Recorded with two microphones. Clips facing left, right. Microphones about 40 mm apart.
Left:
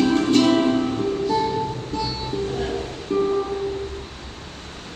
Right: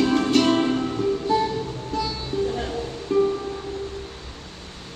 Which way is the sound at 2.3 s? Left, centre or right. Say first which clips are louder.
Right 3 dB; left.